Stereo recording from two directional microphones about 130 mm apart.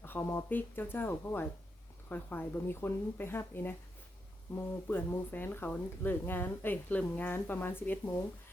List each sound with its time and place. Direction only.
0.0 s speech: 15° left (ahead or behind)